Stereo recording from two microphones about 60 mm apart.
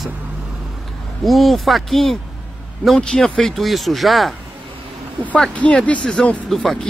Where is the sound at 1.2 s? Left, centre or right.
Centre.